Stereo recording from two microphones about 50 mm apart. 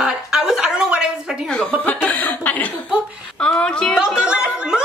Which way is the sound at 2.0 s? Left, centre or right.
Left.